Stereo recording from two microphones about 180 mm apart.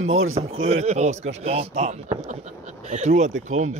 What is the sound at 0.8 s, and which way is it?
Speech, 40° right (ahead or behind).